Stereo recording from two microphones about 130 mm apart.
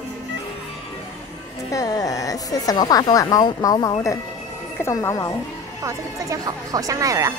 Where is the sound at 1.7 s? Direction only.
25° left (ahead or behind).